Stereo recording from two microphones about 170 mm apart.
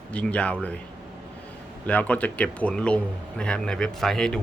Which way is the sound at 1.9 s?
10° left (ahead or behind).